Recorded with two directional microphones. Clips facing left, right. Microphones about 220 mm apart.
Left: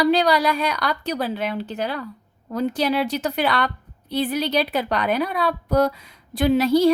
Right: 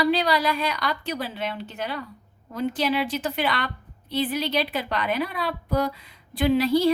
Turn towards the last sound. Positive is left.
turn(degrees=45)  # may be behind; listen again after turning